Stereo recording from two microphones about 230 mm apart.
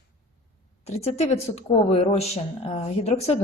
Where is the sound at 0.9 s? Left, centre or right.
Left.